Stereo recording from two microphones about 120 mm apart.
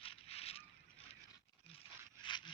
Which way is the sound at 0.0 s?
55° left (ahead or behind).